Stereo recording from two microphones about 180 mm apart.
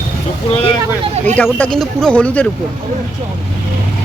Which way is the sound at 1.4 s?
10° left (ahead or behind).